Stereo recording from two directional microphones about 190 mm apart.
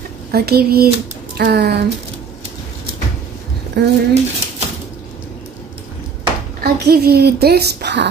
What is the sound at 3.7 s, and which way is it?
Speech, 60° right (ahead or behind).